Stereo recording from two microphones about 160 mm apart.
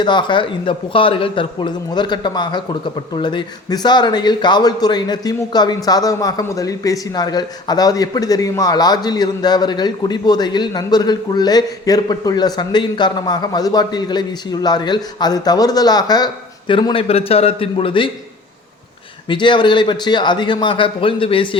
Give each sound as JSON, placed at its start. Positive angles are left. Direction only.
{"t": 0.0, "sound": "speech", "side_deg": 30}
{"t": 19.3, "sound": "speech", "side_deg": 30}